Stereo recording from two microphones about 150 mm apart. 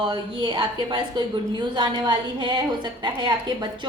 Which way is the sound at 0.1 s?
30° right (ahead or behind).